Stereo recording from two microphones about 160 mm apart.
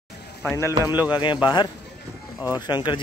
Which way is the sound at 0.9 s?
10° right (ahead or behind).